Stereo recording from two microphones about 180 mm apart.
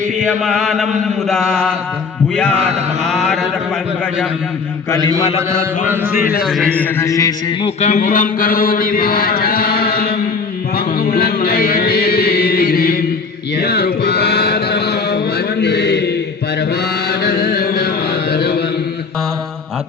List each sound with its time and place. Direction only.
0.2 s chant: centre (ahead or behind)
2.3 s a man's voice: 5° left (ahead or behind)
3.0 s chant: centre (ahead or behind)
5.4 s mantra: 15° right (ahead or behind)
6.4 s a man's voice: centre (ahead or behind); by 7.3 s 20° left (ahead or behind)
7.6 s chant: 40° left (ahead or behind); by 10.2 s 55° left (ahead or behind)
10.8 s music: 55° left (ahead or behind)
13.6 s chant: 60° left (ahead or behind)
17.1 s mantra: 60° left (ahead or behind)